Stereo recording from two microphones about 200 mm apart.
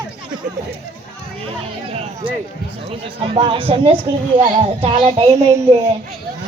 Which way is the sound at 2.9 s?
30° right (ahead or behind).